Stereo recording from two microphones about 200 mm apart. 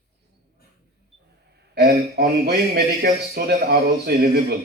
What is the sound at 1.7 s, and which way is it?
A man's voice, 55° right (ahead or behind).